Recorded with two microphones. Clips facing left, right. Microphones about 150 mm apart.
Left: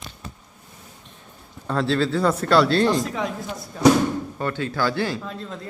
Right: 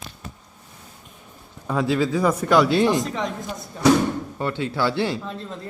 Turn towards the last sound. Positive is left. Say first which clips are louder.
# right 1 dB
turn(degrees=-25)  # may be behind; listen again after turning